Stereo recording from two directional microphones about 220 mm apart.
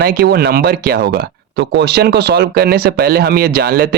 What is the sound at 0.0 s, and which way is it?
Speech, 45° right (ahead or behind).